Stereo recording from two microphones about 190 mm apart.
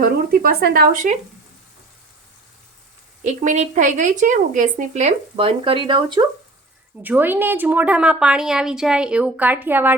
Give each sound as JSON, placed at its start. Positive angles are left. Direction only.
{"t": 0.0, "sound": "speech", "side_deg": -50}
{"t": 3.2, "sound": "speech", "side_deg": -40}
{"t": 7.0, "sound": "a woman's voice", "side_deg": -10}